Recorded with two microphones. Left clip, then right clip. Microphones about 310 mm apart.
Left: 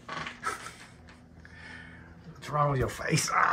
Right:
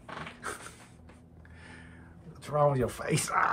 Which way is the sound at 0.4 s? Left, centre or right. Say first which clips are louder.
Left 5 dB; centre.